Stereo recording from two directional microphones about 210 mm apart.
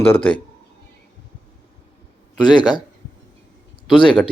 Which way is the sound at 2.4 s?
20° left (ahead or behind).